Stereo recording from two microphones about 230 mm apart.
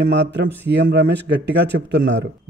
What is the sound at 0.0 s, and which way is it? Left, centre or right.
Speech, right.